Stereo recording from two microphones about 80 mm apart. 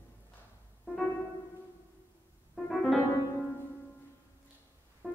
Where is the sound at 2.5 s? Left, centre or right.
Centre.